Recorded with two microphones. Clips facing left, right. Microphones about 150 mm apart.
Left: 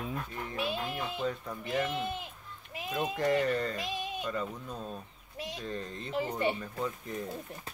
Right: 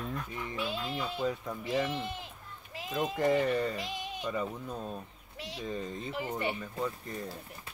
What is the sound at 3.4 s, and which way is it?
Speech, centre (ahead or behind).